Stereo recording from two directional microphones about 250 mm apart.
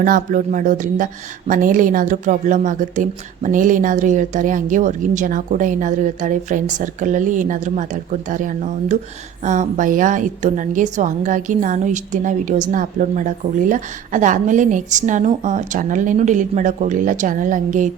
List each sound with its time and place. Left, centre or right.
0.0 s a woman's voice: right